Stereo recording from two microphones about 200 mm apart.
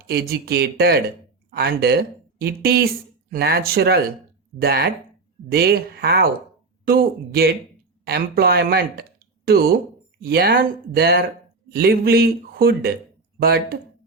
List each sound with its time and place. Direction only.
0.1 s speech: 50° right (ahead or behind)